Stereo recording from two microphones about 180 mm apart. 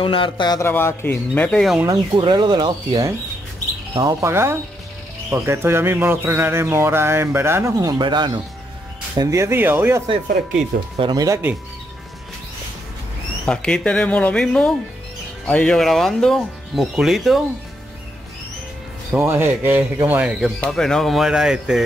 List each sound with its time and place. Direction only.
0.0 s speech: 30° left (ahead or behind); by 1.8 s 5° left (ahead or behind)
1.9 s speech: 25° right (ahead or behind)
11.0 s speech: 20° right (ahead or behind)
13.5 s speech: 5° left (ahead or behind)
19.1 s speech: 10° right (ahead or behind)